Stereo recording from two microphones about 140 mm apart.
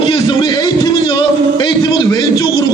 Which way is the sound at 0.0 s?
35° left (ahead or behind).